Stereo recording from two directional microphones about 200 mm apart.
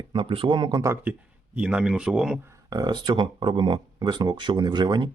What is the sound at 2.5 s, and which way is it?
Speech, 20° right (ahead or behind).